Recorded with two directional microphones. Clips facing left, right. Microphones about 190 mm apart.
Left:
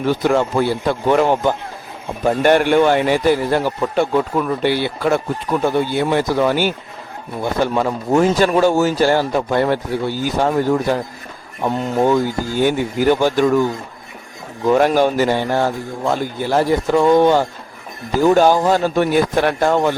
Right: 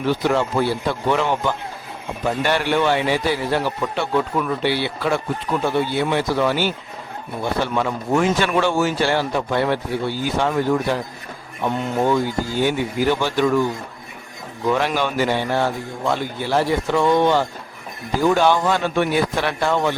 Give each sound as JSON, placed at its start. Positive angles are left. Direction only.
{"t": 0.0, "sound": "a man's voice", "side_deg": 45}
{"t": 14.7, "sound": "a man's voice", "side_deg": 45}